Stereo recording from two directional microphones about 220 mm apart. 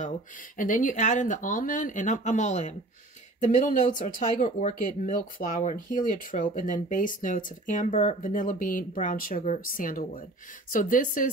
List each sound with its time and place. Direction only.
0.6 s speech: 35° left (ahead or behind)